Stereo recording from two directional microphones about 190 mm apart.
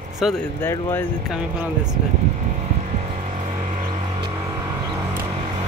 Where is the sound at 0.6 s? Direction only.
10° left (ahead or behind).